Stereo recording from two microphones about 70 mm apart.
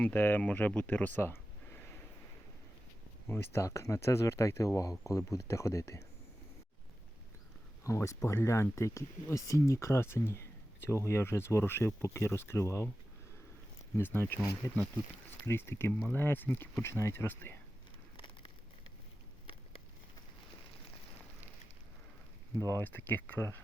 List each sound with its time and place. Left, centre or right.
0.0 s speech: left
3.2 s speech: left
7.9 s speech: left
13.9 s speech: left
15.9 s speech: centre
16.1 s speech: left
16.5 s speech: centre
16.8 s speech: left
22.7 s speech: left